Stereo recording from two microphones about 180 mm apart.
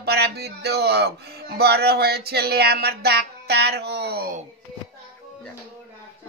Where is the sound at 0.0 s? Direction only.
65° right (ahead or behind).